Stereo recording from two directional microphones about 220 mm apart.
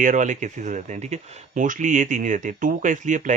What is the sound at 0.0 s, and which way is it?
Speech, 35° right (ahead or behind).